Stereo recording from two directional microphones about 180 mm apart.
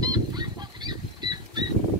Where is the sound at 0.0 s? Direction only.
20° right (ahead or behind).